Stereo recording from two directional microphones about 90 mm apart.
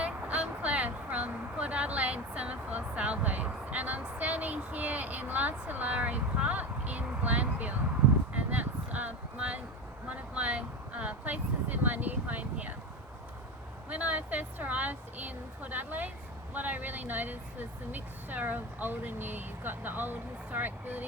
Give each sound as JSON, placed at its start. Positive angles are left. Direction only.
{"t": 0.0, "sound": "vehicle", "side_deg": -15}
{"t": 8.3, "sound": "a sound", "side_deg": -15}
{"t": 13.9, "sound": "a woman's voice", "side_deg": -15}